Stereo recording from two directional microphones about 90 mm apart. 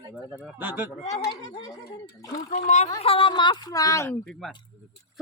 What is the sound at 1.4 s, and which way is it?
Speech, 45° left (ahead or behind).